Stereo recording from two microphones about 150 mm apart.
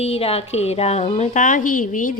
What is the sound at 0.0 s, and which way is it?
A woman's voice, 40° left (ahead or behind).